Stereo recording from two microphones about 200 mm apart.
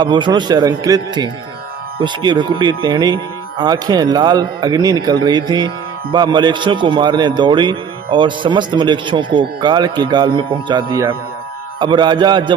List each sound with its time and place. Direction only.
0.0 s speech: 20° right (ahead or behind)